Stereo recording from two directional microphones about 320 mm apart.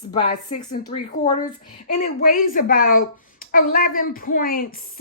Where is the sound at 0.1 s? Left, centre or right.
Left.